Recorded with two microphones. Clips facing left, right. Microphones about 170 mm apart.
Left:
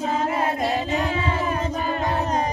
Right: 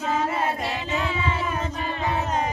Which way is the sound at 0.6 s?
40° left (ahead or behind).